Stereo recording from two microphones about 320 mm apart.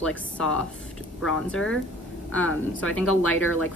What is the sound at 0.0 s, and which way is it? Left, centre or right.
A woman's voice, centre.